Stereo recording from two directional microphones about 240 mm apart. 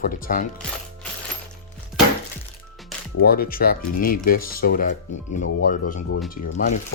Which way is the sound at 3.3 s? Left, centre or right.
Left.